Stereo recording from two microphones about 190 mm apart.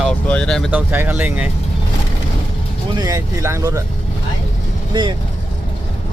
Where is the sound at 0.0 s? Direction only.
5° left (ahead or behind).